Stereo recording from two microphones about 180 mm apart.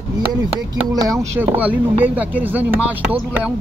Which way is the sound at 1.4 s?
10° right (ahead or behind).